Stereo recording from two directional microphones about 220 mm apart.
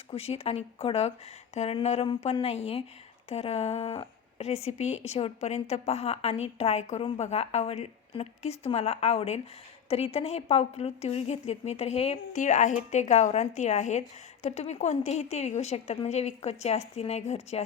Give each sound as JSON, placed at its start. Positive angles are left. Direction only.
{"t": 0.1, "sound": "speech", "side_deg": 25}